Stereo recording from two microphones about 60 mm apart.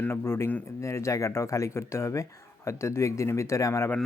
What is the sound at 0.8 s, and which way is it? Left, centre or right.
Speech, left.